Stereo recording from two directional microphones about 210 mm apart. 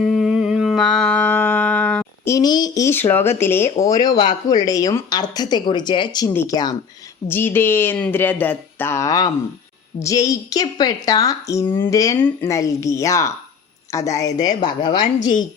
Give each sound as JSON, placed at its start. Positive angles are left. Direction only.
{"t": 0.0, "sound": "mantra", "side_deg": 0}
{"t": 7.3, "sound": "a woman's voice", "side_deg": 10}